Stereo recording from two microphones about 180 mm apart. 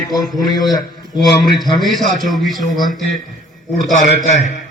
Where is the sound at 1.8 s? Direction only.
Centre (ahead or behind).